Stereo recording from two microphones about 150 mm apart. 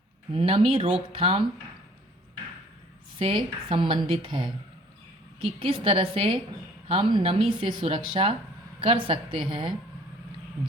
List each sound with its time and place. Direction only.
0.3 s a woman's voice: 40° right (ahead or behind)
3.2 s a woman's voice: 35° right (ahead or behind)